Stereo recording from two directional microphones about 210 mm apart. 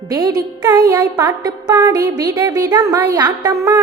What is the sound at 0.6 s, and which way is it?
Music, 20° right (ahead or behind).